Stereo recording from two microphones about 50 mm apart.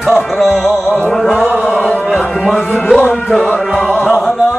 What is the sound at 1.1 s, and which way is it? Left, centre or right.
Chant, centre.